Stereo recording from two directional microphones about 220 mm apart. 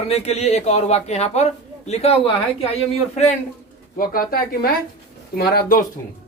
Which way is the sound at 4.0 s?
40° left (ahead or behind).